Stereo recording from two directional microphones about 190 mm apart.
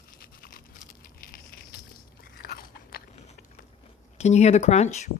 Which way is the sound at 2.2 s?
50° left (ahead or behind).